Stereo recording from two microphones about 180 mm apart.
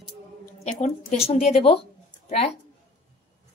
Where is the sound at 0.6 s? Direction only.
35° left (ahead or behind).